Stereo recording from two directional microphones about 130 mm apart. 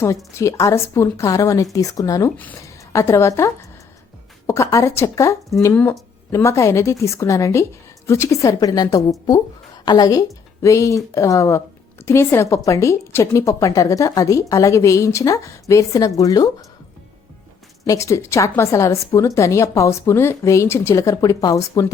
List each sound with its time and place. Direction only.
0.3 s a woman's voice: 25° left (ahead or behind)
17.8 s a woman's voice: 25° left (ahead or behind)